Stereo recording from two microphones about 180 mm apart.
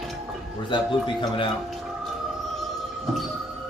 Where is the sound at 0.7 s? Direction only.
25° left (ahead or behind).